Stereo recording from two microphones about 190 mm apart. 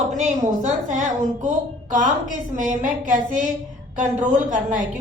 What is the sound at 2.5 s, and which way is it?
A woman's voice, 45° right (ahead or behind).